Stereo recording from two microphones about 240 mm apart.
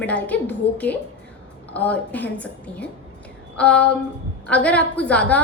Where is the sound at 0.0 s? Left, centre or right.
Centre.